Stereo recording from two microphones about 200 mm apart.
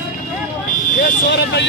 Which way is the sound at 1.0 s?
55° left (ahead or behind).